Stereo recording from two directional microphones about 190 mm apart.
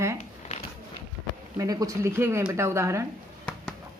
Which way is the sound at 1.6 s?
20° right (ahead or behind).